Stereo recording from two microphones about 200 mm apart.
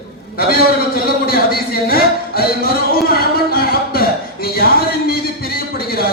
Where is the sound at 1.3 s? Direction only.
50° left (ahead or behind).